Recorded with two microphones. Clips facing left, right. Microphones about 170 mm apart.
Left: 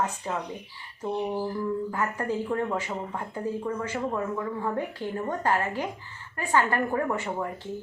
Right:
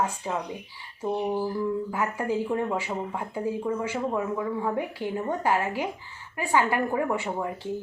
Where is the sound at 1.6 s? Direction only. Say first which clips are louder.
Right 1 dB; 10° right (ahead or behind).